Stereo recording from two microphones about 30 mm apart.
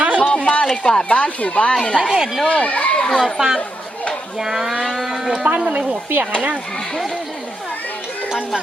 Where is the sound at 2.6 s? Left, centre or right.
Left.